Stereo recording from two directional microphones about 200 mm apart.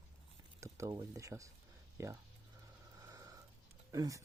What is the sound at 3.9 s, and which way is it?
Speech, 15° right (ahead or behind).